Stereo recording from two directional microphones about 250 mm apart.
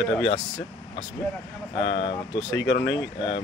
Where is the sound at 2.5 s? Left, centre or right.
Left.